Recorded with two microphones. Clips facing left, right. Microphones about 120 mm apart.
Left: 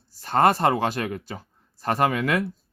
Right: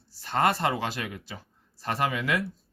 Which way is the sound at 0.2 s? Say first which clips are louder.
Left 6 dB; 45° left (ahead or behind).